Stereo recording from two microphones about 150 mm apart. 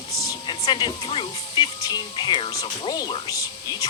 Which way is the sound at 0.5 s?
30° left (ahead or behind).